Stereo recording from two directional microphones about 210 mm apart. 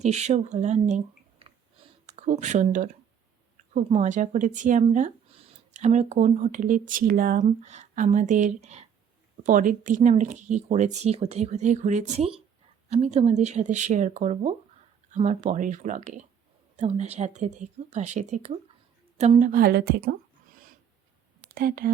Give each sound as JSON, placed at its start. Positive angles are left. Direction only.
{"t": 0.0, "sound": "a woman's voice", "side_deg": -30}
{"t": 21.5, "sound": "speech", "side_deg": -45}